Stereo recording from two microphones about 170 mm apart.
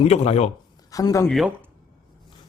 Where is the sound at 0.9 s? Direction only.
20° left (ahead or behind).